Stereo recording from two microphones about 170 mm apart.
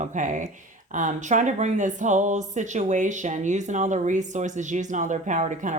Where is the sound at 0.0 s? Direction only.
50° right (ahead or behind).